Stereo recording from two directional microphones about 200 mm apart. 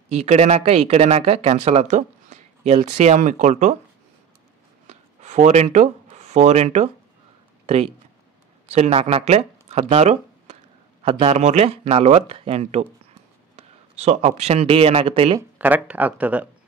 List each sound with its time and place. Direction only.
0.1 s speech: 35° right (ahead or behind)
4.8 s a sound: 35° right (ahead or behind)
7.6 s a man's voice: 30° right (ahead or behind)
15.5 s speech: 10° right (ahead or behind)